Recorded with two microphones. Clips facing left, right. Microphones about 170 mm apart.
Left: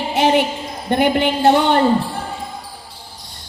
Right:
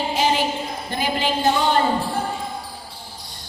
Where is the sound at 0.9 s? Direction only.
60° left (ahead or behind).